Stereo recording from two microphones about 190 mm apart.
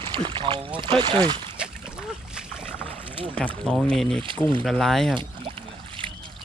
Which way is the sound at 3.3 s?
5° left (ahead or behind).